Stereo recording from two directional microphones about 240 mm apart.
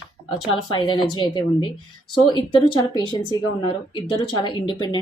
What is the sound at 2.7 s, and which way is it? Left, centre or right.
A woman's voice, centre.